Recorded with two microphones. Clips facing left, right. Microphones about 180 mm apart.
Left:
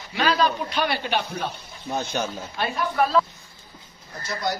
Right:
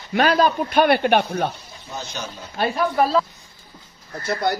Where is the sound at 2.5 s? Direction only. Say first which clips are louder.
Right 5 dB; 35° right (ahead or behind).